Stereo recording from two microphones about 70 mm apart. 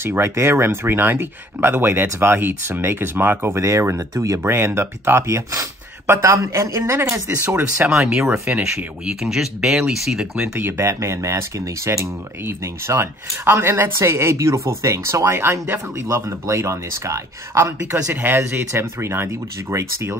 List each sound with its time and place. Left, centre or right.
0.0 s speech: right
8.0 s speech: centre
10.6 s speech: right
10.9 s speech: right
18.0 s speech: right